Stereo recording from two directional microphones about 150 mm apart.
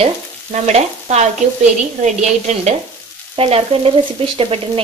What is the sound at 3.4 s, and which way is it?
Stir, 40° right (ahead or behind).